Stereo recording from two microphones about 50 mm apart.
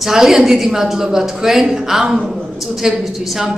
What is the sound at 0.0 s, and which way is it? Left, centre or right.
A woman's voice, centre.